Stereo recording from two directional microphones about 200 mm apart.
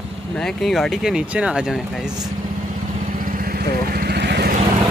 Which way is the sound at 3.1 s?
45° right (ahead or behind).